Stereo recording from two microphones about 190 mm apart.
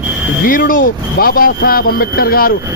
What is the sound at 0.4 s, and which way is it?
A man's voice, 50° left (ahead or behind).